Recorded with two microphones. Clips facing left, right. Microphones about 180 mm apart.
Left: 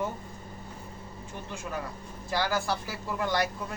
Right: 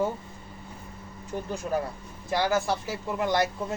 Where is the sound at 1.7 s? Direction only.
35° right (ahead or behind).